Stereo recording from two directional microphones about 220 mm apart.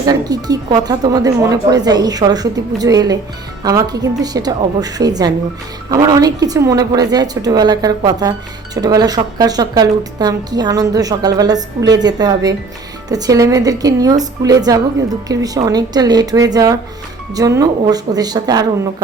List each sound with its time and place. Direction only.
0.1 s speech: 15° right (ahead or behind)